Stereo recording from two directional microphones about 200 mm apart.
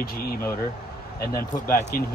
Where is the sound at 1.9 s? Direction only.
45° left (ahead or behind).